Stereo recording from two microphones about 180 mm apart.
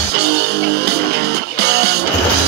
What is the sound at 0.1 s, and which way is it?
Music, 65° right (ahead or behind).